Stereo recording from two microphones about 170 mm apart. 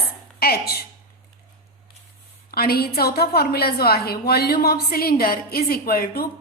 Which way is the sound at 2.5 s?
65° left (ahead or behind).